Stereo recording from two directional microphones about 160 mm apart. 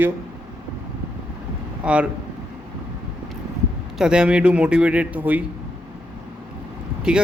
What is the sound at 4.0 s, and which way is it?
Speech, 5° right (ahead or behind).